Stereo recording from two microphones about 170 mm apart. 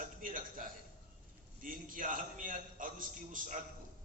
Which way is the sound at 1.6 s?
55° right (ahead or behind).